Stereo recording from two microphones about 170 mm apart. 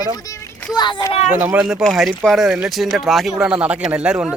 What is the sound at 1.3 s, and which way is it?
Speech, 10° right (ahead or behind).